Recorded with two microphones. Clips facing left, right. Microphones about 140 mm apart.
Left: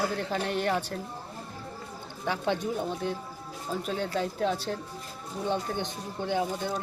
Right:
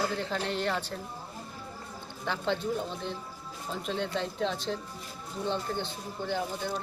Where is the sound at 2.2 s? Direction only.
15° left (ahead or behind).